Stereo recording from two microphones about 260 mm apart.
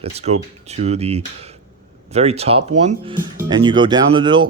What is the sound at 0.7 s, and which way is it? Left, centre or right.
Speech, right.